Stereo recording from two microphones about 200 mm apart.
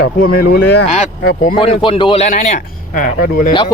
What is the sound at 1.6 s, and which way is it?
Speech, 30° left (ahead or behind).